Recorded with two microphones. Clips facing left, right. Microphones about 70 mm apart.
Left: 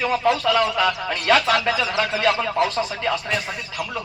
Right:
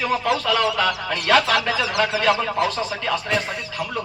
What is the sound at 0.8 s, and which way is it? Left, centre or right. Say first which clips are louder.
Speech: left 1 dB; left.